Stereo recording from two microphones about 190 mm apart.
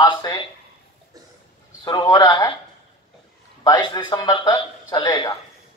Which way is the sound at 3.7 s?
20° left (ahead or behind).